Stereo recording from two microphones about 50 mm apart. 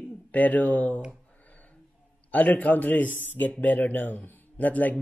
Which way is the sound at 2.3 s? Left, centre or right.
Left.